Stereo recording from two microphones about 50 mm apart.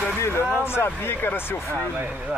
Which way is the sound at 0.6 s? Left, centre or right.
Left.